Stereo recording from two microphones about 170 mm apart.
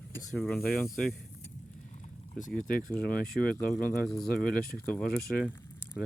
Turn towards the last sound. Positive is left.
turn(degrees=10)  # may be behind; listen again after turning